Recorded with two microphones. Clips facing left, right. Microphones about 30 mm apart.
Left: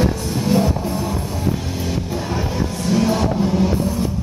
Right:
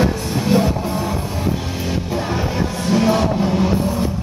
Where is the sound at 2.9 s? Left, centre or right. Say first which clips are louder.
Right 2 dB; centre.